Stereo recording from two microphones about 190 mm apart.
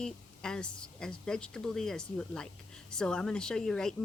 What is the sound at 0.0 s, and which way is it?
Speech, 5° left (ahead or behind).